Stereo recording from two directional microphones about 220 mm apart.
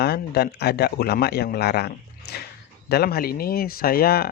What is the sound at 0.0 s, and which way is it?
Speech, 45° left (ahead or behind).